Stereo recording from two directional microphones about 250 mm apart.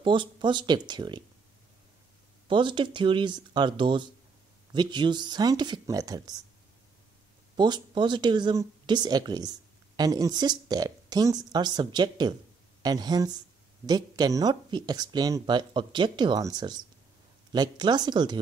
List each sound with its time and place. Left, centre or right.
0.0 s speech: centre
2.4 s speech: centre
7.5 s speech: centre